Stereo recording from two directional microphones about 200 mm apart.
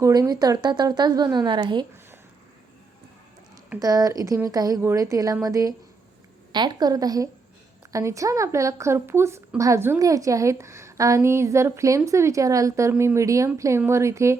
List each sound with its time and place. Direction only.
0.0 s speech: 20° right (ahead or behind)
3.8 s speech: 20° right (ahead or behind)